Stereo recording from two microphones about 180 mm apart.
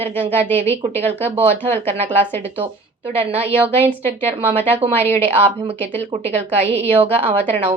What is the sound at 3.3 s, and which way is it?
A woman's voice, 30° right (ahead or behind).